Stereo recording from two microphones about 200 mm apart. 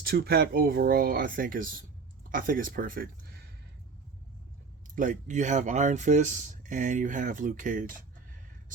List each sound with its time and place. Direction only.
0.0 s speech: 50° right (ahead or behind)
4.9 s speech: 40° right (ahead or behind)